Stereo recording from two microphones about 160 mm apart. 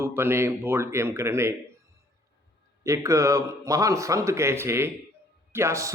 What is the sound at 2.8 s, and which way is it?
Speech, 20° right (ahead or behind).